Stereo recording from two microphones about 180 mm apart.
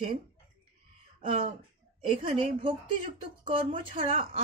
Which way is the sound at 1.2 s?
30° right (ahead or behind).